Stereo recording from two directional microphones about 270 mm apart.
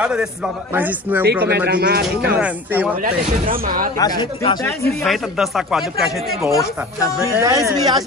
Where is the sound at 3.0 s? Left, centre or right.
Right.